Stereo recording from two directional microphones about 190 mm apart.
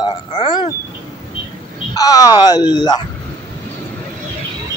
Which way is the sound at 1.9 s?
20° left (ahead or behind).